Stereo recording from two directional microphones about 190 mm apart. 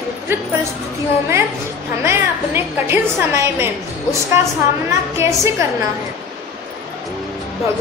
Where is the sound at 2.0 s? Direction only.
10° right (ahead or behind).